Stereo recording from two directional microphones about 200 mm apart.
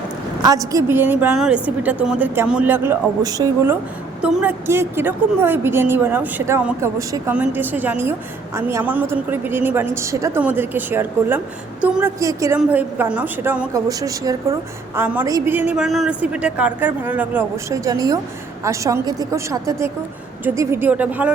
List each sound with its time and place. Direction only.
0.4 s a woman's voice: 15° right (ahead or behind)